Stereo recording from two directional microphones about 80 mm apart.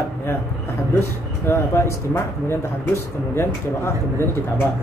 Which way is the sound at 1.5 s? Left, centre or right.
Left.